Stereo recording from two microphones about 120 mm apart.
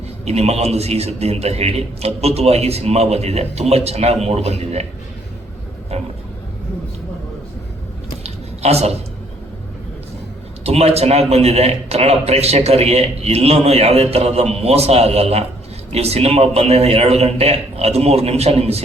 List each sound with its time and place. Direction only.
0.3 s a man's voice: 65° right (ahead or behind)
5.9 s a man's voice: 60° right (ahead or behind)
8.2 s a sound: 65° right (ahead or behind)
10.6 s a man's voice: 60° right (ahead or behind)